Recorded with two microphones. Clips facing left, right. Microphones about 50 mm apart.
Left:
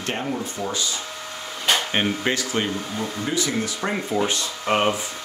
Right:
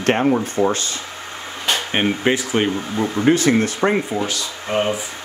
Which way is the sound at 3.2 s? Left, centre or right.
Right.